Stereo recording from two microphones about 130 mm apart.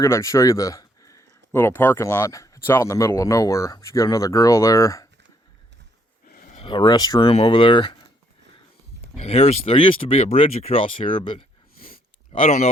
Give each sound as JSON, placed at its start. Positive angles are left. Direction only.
{"t": 0.0, "sound": "speech", "side_deg": 20}
{"t": 6.3, "sound": "a sound", "side_deg": 90}
{"t": 6.6, "sound": "speech", "side_deg": 40}
{"t": 7.3, "sound": "speech", "side_deg": 45}
{"t": 9.2, "sound": "speech", "side_deg": 50}
{"t": 11.8, "sound": "a sound", "side_deg": 90}